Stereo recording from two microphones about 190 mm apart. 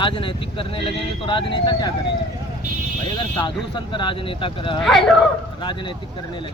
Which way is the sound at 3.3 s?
25° left (ahead or behind).